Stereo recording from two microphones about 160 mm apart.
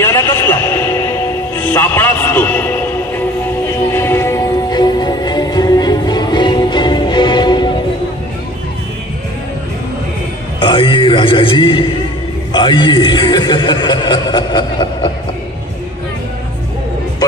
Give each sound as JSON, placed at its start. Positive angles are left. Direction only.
{"t": 0.0, "sound": "music", "side_deg": 15}
{"t": 10.6, "sound": "a sound", "side_deg": 30}
{"t": 12.5, "sound": "a man's voice", "side_deg": 30}